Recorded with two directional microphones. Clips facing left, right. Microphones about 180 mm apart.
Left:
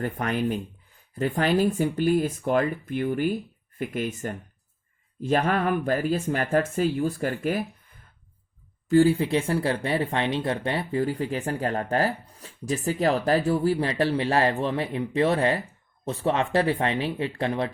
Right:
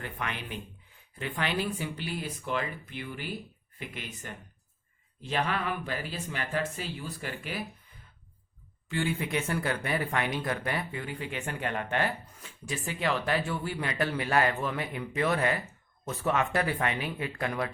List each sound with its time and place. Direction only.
0.0 s speech: 40° left (ahead or behind)
8.9 s speech: 35° left (ahead or behind)